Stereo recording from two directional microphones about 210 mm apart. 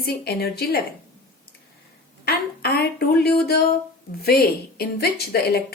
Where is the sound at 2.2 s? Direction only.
50° left (ahead or behind).